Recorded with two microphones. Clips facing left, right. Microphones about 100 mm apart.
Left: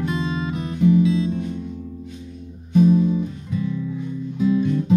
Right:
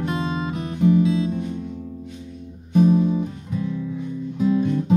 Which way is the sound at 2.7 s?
50° right (ahead or behind).